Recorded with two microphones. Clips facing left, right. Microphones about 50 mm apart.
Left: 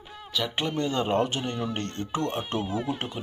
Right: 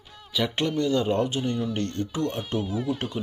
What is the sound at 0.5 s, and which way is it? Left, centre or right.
Speech, centre.